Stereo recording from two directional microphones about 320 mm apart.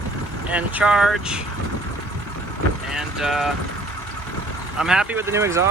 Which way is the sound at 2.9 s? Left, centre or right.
Centre.